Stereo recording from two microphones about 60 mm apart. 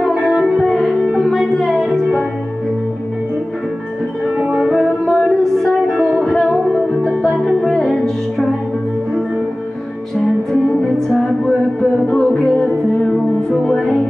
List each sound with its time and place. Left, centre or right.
0.3 s music: centre
4.6 s music: centre
10.2 s music: centre
12.5 s music: left
13.1 s music: centre